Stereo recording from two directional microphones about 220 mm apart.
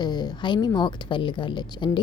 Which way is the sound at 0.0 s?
20° left (ahead or behind).